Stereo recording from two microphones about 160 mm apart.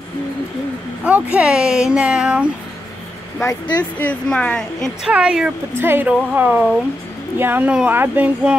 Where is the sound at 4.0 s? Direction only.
10° left (ahead or behind).